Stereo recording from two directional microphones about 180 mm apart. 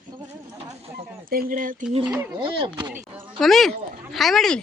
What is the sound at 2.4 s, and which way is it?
Speech, 25° right (ahead or behind).